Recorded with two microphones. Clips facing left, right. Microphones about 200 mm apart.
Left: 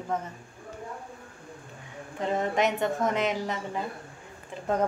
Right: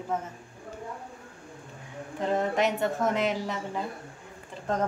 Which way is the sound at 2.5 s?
Centre (ahead or behind).